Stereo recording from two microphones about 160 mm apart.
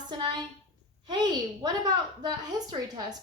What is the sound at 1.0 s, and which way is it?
A woman's voice, 25° right (ahead or behind).